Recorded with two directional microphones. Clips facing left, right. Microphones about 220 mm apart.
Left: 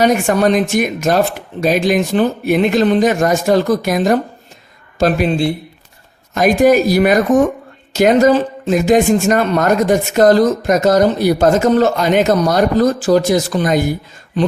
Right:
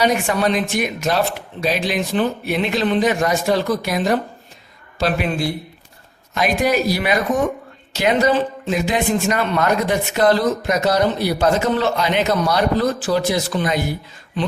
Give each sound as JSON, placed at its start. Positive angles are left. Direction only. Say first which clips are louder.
{"t": 0.0, "sound": "speech", "louder": "left 5 dB", "side_deg": 45}
{"t": 6.3, "sound": "speech", "louder": "left 8 dB", "side_deg": 45}